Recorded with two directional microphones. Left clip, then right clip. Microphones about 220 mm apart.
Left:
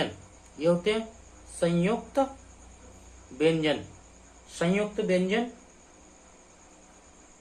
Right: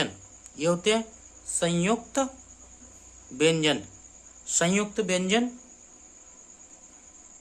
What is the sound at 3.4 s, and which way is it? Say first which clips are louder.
Speech: right 2 dB; 45° right (ahead or behind).